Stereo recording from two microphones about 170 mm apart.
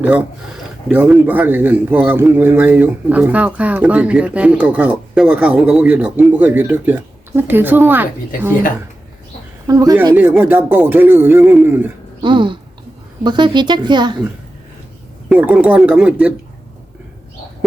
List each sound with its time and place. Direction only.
0.0 s speech: 10° right (ahead or behind)
9.6 s speech: 20° right (ahead or behind)
12.2 s speech: 30° right (ahead or behind)
15.3 s speech: 10° right (ahead or behind)